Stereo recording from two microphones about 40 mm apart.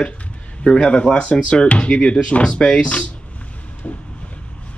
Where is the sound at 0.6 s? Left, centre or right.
Left.